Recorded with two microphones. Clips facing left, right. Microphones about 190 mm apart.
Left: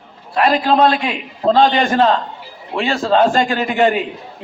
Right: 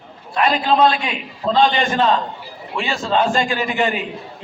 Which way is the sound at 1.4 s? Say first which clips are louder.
Left 4 dB; 60° left (ahead or behind).